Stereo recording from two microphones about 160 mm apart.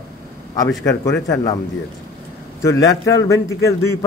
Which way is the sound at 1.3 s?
20° left (ahead or behind).